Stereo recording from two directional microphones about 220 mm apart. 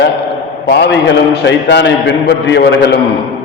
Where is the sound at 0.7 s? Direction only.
55° left (ahead or behind).